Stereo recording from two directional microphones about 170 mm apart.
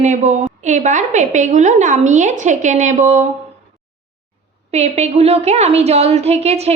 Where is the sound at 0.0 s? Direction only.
40° right (ahead or behind).